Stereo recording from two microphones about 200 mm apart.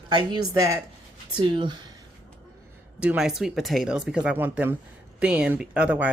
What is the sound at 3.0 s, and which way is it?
A woman's voice, 5° right (ahead or behind).